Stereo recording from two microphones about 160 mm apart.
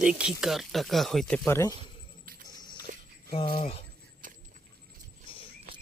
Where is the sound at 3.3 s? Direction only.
35° left (ahead or behind).